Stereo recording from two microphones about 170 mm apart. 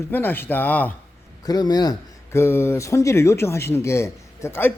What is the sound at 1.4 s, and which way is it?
Speech, 25° left (ahead or behind).